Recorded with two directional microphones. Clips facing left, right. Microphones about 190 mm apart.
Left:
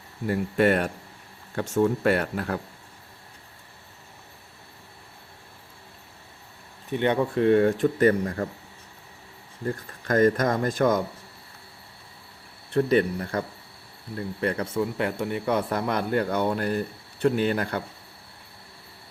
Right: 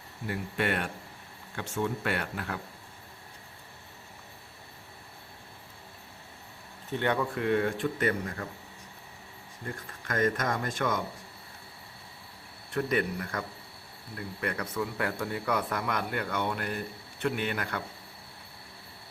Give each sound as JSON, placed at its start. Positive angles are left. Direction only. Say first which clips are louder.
{"t": 0.3, "sound": "speech", "louder": "left 9 dB", "side_deg": 40}
{"t": 6.9, "sound": "speech", "louder": "left 6 dB", "side_deg": 20}
{"t": 9.6, "sound": "speech", "louder": "left 9 dB", "side_deg": 35}
{"t": 12.7, "sound": "speech", "louder": "left 7 dB", "side_deg": 30}